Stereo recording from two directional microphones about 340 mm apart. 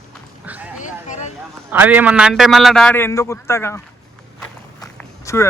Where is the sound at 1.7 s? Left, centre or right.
Centre.